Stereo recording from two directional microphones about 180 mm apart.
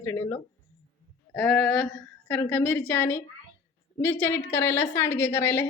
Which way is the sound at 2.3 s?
10° left (ahead or behind).